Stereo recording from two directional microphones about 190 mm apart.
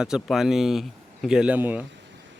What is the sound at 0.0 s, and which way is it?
Speech, centre (ahead or behind).